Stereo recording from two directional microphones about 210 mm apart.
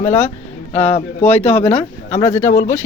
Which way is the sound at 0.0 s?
10° left (ahead or behind).